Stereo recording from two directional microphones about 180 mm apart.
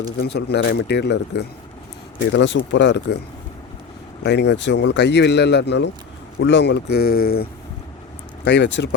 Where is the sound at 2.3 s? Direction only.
85° left.